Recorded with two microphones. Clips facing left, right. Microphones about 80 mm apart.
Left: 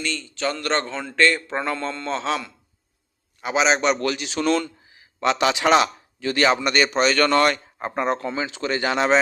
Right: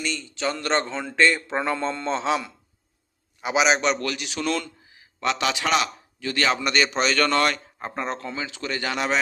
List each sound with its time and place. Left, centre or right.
0.0 s speech: centre
4.0 s a man's voice: left
5.2 s a man's voice: left
6.6 s a man's voice: centre; by 9.1 s left